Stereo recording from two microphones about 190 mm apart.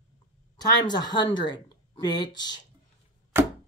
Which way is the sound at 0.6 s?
20° left (ahead or behind).